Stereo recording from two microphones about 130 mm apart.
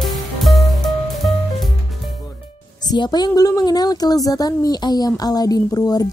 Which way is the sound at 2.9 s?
30° left (ahead or behind).